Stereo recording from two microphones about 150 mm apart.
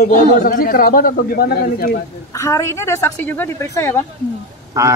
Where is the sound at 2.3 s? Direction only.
20° left (ahead or behind).